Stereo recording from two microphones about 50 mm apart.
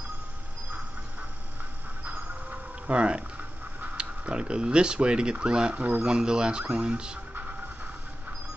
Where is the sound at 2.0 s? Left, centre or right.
Right.